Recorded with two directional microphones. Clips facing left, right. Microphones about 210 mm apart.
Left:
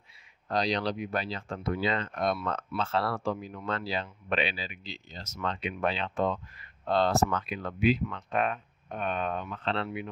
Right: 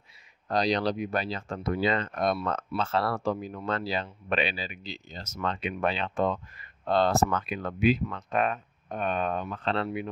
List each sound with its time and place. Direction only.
0.5 s speech: 40° right (ahead or behind)